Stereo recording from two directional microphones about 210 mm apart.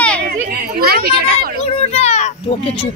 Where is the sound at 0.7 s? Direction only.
45° right (ahead or behind).